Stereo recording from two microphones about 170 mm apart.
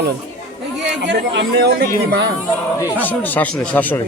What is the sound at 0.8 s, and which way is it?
Speech, 90° right.